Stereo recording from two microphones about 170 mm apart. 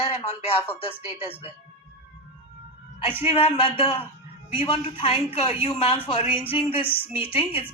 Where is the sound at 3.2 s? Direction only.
35° left (ahead or behind).